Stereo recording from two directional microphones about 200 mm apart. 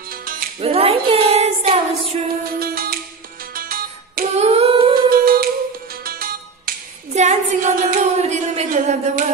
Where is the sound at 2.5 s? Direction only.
50° right (ahead or behind).